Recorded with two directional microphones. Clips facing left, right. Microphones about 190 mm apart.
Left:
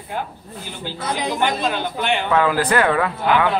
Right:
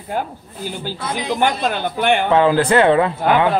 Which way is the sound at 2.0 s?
50° right (ahead or behind).